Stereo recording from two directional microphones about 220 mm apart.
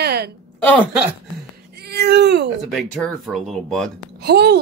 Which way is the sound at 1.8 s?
50° right (ahead or behind).